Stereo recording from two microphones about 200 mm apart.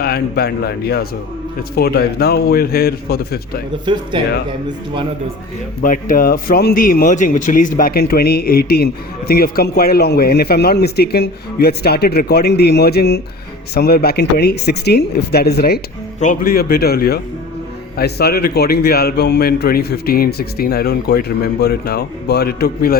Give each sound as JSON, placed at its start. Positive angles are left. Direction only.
{"t": 0.0, "sound": "a man's voice", "side_deg": 50}
{"t": 3.9, "sound": "speech", "side_deg": -25}
{"t": 5.8, "sound": "a man's voice", "side_deg": 40}